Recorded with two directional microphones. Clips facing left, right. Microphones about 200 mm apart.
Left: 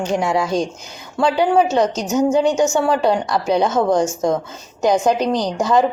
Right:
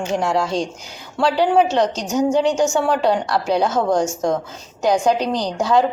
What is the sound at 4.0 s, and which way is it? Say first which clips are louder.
A woman's voice: left 2 dB; 5° left (ahead or behind).